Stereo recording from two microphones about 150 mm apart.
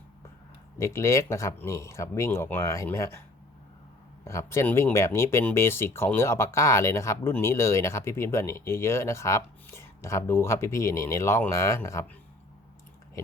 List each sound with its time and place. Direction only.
0.8 s speech: 20° left (ahead or behind)
4.2 s speech: 20° left (ahead or behind)